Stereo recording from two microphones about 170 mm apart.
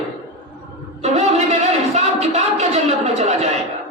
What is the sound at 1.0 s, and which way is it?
Music, 40° right (ahead or behind).